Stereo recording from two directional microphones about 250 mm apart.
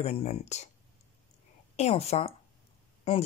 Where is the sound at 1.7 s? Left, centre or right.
Left.